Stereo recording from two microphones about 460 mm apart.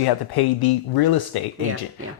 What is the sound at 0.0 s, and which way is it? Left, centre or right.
Speech, left.